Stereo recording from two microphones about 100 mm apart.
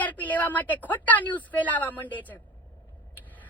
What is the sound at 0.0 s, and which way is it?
A woman's voice, 15° left (ahead or behind).